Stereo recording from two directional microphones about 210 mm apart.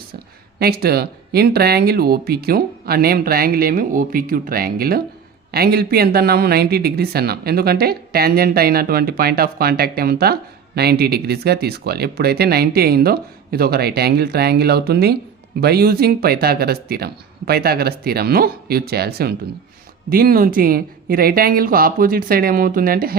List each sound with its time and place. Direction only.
0.6 s speech: 45° right (ahead or behind)